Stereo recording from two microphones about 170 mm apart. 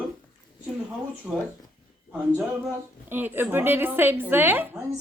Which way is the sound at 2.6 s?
10° right (ahead or behind).